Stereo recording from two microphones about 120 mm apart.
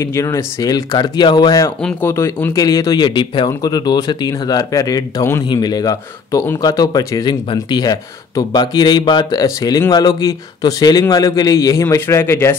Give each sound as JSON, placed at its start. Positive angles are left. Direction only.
{"t": 0.0, "sound": "speech", "side_deg": 25}
{"t": 1.8, "sound": "speech", "side_deg": 5}
{"t": 2.0, "sound": "speech", "side_deg": 20}